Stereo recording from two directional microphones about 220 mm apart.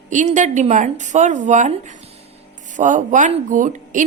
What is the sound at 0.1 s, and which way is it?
A woman's voice, 35° right (ahead or behind).